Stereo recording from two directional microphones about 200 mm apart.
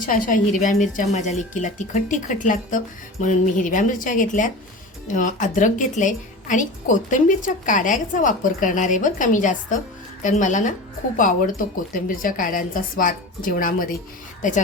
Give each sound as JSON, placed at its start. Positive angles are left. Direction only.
{"t": 0.0, "sound": "a woman's voice", "side_deg": 40}